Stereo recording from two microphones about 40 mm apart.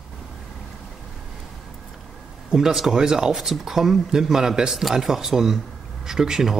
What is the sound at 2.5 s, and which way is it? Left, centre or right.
Speech, centre.